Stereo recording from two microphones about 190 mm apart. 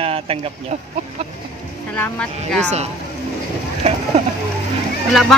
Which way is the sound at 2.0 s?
5° left (ahead or behind).